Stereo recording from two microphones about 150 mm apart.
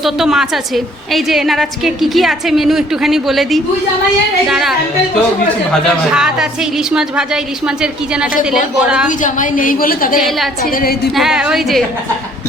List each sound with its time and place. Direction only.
0.0 s a woman's voice: centre (ahead or behind)
6.1 s a woman's voice: 5° right (ahead or behind)
9.0 s a woman's voice: 60° left (ahead or behind)
10.2 s a woman's voice: centre (ahead or behind)
10.7 s a woman's voice: 80° left
11.1 s a woman's voice: 5° right (ahead or behind)